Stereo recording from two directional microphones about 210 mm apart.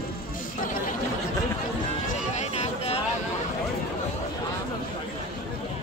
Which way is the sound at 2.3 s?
30° left (ahead or behind).